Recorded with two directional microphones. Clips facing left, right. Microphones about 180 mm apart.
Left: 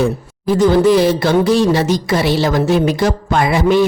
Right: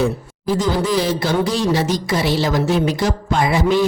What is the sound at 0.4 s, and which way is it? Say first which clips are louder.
A woman's voice: left 8 dB; 60° left (ahead or behind).